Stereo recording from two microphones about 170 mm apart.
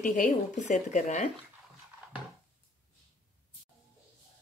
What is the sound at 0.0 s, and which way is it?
Speech, 50° left (ahead or behind).